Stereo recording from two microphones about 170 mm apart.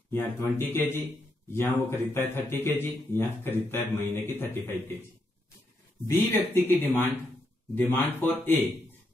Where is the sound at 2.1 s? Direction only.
15° left (ahead or behind).